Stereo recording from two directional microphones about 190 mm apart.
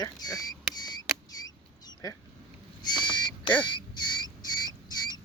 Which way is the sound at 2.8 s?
20° left (ahead or behind).